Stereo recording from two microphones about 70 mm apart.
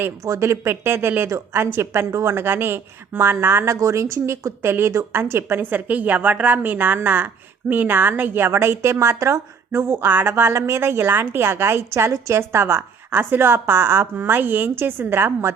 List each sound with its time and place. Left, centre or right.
0.3 s a woman's voice: right
3.8 s a woman's voice: right
5.7 s a woman's voice: right
13.1 s a woman's voice: right